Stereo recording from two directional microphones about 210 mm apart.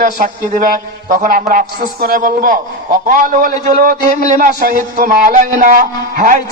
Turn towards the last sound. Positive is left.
turn(degrees=-40)  # may be behind; listen again after turning